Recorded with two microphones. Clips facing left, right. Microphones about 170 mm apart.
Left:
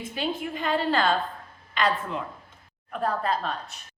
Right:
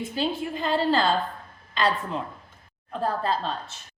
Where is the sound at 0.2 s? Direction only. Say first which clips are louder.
Right 2 dB; 30° right (ahead or behind).